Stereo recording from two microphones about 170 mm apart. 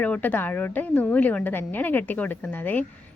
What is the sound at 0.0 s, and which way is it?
A woman's voice, 10° left (ahead or behind).